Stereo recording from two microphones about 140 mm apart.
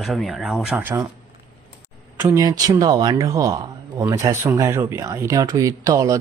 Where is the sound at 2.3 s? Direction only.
25° right (ahead or behind).